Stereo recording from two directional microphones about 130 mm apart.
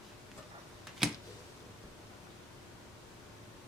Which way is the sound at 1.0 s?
5° right (ahead or behind).